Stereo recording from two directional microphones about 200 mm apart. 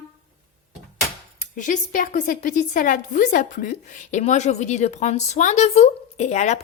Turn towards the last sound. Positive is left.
turn(degrees=35)  # may be behind; listen again after turning